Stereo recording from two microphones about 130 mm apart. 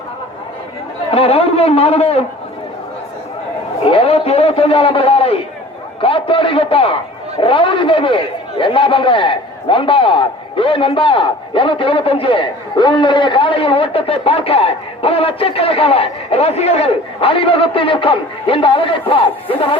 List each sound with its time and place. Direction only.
1.1 s a man's voice: 50° left (ahead or behind)
3.8 s a sound: 50° left (ahead or behind)
6.0 s a man's voice: 45° left (ahead or behind)